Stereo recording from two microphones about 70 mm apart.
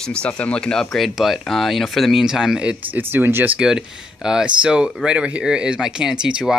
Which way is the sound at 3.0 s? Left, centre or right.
Right.